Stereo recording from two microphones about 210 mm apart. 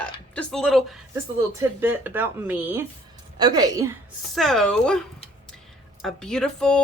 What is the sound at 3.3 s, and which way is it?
Speech, 20° right (ahead or behind).